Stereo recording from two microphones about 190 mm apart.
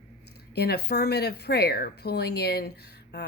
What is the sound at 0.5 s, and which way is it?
A woman's voice, 60° left (ahead or behind).